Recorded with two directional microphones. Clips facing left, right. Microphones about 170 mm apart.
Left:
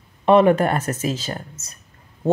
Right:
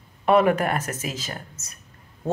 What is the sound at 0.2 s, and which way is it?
Speech, 25° left (ahead or behind).